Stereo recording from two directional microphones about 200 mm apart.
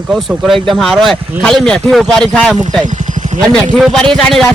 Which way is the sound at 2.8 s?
35° right (ahead or behind).